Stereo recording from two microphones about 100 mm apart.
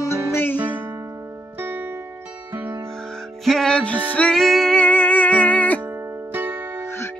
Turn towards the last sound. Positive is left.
turn(degrees=25)  # may be behind; listen again after turning